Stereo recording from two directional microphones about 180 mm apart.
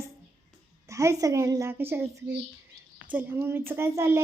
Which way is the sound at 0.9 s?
15° right (ahead or behind).